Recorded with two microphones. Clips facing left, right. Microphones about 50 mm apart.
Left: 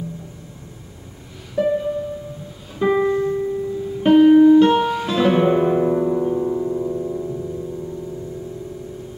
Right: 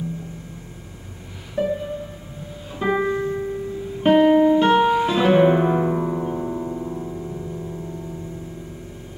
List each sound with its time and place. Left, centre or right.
1.6 s music: centre
2.8 s music: centre
4.0 s guitar: centre